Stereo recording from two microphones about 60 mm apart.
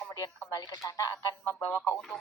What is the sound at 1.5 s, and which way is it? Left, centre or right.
Speech, left.